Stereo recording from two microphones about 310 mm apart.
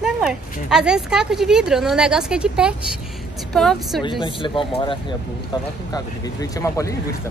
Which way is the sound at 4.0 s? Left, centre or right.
Centre.